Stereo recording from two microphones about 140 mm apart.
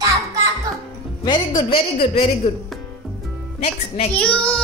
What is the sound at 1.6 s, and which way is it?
Speech, 40° left (ahead or behind).